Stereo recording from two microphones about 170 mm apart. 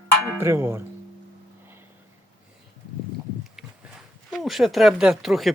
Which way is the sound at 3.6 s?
5° right (ahead or behind).